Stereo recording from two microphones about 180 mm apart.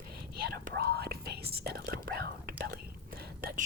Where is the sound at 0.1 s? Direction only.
55° right (ahead or behind).